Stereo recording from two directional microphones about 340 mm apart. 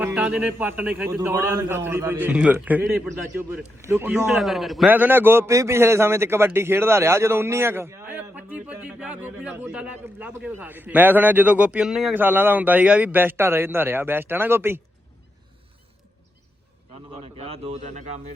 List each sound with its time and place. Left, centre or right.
0.0 s a man's voice: centre
17.3 s speech: centre